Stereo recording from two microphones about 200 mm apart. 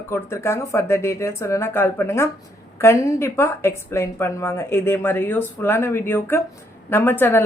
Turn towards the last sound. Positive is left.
turn(degrees=10)  # may be behind; listen again after turning